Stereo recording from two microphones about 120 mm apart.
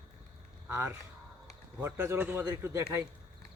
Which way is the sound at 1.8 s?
20° right (ahead or behind).